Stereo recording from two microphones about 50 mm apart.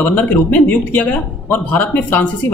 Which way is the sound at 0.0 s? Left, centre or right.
Left.